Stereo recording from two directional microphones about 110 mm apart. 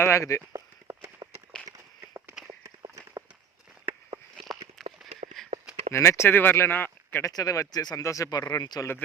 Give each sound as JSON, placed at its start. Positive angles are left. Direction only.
{"t": 0.0, "sound": "speech", "side_deg": 25}
{"t": 0.5, "sound": "horse", "side_deg": -30}
{"t": 4.8, "sound": "run", "side_deg": 5}
{"t": 5.4, "sound": "a sound", "side_deg": 0}
{"t": 5.9, "sound": "speech", "side_deg": 25}
{"t": 7.3, "sound": "speech", "side_deg": 30}